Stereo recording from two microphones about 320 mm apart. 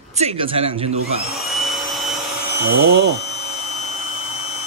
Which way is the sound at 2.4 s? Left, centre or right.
Right.